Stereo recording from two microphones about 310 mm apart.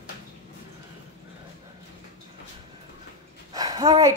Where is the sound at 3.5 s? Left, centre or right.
Centre.